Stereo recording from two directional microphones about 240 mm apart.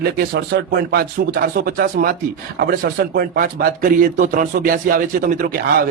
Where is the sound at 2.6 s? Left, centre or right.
Right.